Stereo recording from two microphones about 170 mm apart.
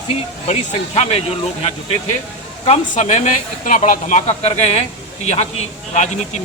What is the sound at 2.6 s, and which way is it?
Speech, 40° left (ahead or behind).